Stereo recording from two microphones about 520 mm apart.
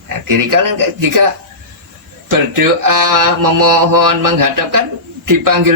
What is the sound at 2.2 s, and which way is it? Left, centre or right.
A man's voice, right.